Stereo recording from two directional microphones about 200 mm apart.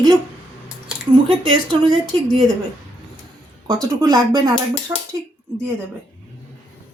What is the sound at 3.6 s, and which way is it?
Speech, 15° right (ahead or behind).